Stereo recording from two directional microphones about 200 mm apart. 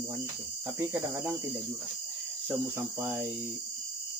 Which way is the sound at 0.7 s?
10° right (ahead or behind).